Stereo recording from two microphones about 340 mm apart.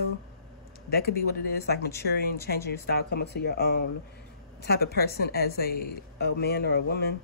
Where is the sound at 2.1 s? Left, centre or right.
Left.